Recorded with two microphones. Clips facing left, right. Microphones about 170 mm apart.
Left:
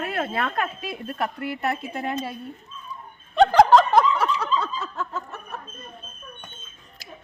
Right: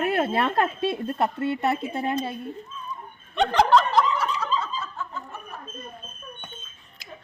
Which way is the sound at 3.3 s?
35° left (ahead or behind).